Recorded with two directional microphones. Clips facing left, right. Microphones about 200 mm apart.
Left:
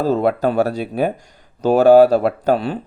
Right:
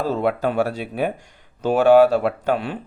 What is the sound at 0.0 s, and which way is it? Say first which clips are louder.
A man's voice: left 4 dB; 40° left (ahead or behind).